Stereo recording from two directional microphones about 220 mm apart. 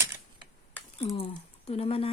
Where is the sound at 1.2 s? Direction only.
25° left (ahead or behind).